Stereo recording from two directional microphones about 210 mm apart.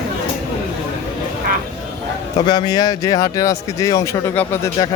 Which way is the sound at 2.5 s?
20° left (ahead or behind).